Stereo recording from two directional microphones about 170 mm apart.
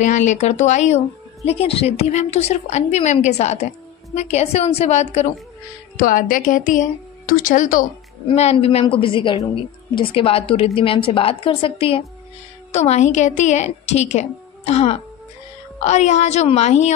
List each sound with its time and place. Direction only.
0.0 s speech: 45° left (ahead or behind)
5.9 s speech: 55° left (ahead or behind)
8.3 s speech: 35° left (ahead or behind)